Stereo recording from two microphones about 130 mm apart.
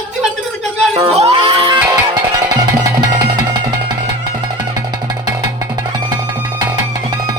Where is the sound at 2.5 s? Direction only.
30° right (ahead or behind).